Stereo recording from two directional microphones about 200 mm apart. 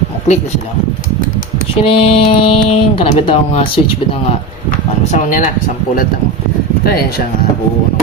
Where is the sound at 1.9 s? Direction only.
30° left (ahead or behind).